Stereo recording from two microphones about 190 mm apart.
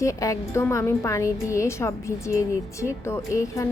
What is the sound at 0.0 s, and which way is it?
A woman's voice, 15° left (ahead or behind).